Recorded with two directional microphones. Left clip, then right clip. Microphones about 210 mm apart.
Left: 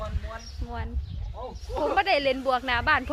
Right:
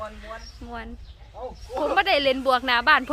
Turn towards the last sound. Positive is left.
turn(degrees=-20)  # may be behind; listen again after turning